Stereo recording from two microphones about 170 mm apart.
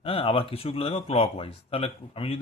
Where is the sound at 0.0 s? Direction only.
35° left (ahead or behind).